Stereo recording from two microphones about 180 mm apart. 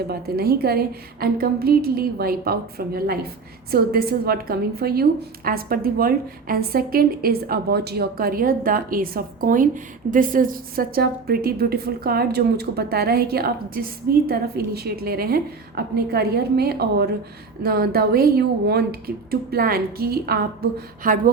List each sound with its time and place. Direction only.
0.1 s a woman's voice: 60° right (ahead or behind)